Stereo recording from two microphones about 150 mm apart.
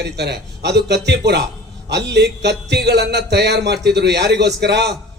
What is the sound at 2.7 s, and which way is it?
A man's voice, 90° right.